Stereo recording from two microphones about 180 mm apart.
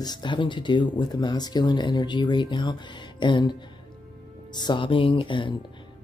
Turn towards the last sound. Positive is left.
turn(degrees=25)  # may be behind; listen again after turning